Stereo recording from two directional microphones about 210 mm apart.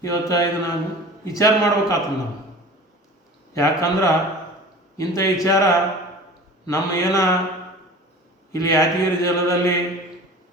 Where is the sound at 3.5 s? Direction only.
15° left (ahead or behind).